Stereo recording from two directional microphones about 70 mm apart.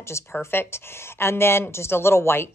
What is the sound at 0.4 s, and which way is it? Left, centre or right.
A woman's voice, left.